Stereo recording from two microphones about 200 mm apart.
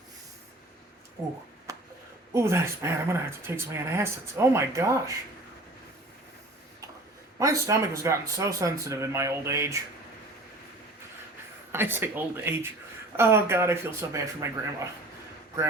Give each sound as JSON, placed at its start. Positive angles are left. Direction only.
{"t": 1.7, "sound": "a sound", "side_deg": -15}
{"t": 2.3, "sound": "speech", "side_deg": -15}
{"t": 7.3, "sound": "speech", "side_deg": -15}
{"t": 11.7, "sound": "speech", "side_deg": -10}